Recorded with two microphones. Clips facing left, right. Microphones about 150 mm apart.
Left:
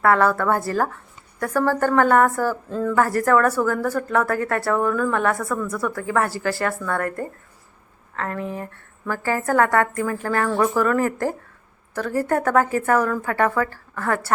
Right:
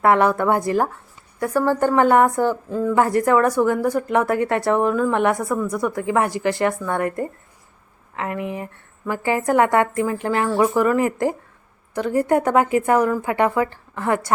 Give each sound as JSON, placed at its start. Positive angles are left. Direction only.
{"t": 0.0, "sound": "a woman's voice", "side_deg": -20}